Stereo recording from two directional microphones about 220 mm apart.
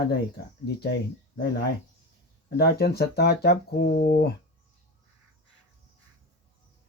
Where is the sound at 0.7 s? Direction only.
50° left (ahead or behind).